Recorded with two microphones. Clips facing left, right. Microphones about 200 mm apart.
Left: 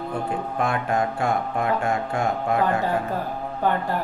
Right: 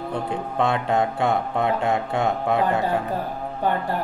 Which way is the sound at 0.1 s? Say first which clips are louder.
Even; 25° right (ahead or behind).